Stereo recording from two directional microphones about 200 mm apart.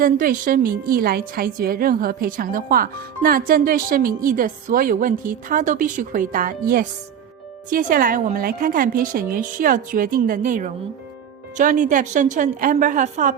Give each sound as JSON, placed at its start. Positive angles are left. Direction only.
{"t": 0.0, "sound": "a woman's voice", "side_deg": -45}